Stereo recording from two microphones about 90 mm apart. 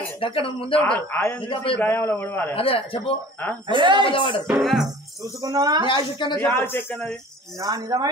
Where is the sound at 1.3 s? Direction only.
75° left (ahead or behind).